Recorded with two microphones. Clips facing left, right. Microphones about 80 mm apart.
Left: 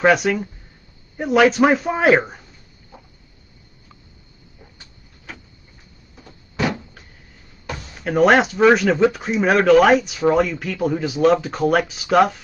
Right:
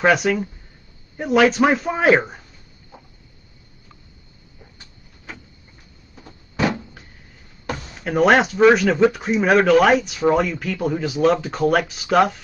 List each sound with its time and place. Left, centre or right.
0.0 s speech: centre
6.1 s a sound: right
8.0 s speech: centre